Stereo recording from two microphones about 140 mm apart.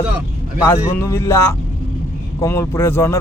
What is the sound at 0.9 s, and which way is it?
A man's voice, 20° left (ahead or behind).